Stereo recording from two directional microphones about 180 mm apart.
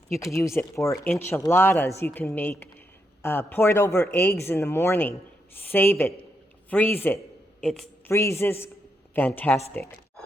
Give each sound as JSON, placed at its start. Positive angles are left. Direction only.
{"t": 0.3, "sound": "speech", "side_deg": 15}
{"t": 7.6, "sound": "a sound", "side_deg": 5}
{"t": 8.1, "sound": "speech", "side_deg": 15}